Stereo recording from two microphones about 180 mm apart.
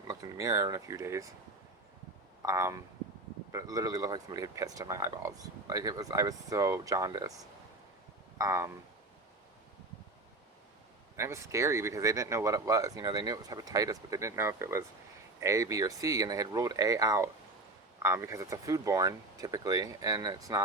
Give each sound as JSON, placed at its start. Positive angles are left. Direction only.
{"t": 0.1, "sound": "speech", "side_deg": -20}
{"t": 2.4, "sound": "speech", "side_deg": -20}
{"t": 8.4, "sound": "speech", "side_deg": -15}
{"t": 11.2, "sound": "speech", "side_deg": -15}